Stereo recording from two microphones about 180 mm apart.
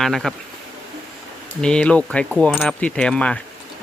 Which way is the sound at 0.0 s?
Centre (ahead or behind).